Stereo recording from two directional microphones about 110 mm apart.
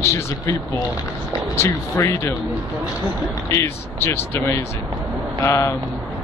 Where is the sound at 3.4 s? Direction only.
25° left (ahead or behind).